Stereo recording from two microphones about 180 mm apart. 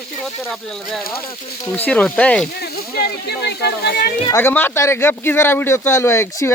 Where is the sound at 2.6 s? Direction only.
65° left (ahead or behind).